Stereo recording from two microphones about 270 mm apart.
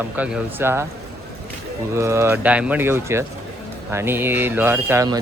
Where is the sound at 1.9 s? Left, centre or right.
Centre.